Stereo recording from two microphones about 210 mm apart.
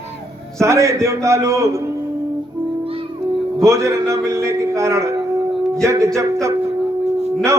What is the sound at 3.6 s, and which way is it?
A man's voice, 15° right (ahead or behind).